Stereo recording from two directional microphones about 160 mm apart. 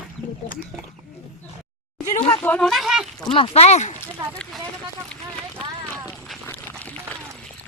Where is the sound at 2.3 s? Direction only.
10° left (ahead or behind).